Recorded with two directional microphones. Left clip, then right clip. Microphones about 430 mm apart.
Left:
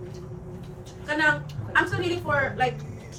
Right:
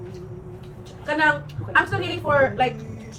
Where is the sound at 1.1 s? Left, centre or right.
Centre.